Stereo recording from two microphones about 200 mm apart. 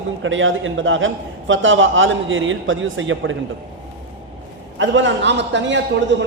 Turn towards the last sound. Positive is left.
turn(degrees=-60)  # may be behind; listen again after turning